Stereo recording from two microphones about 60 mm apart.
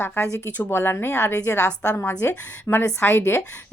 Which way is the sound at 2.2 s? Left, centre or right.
Left.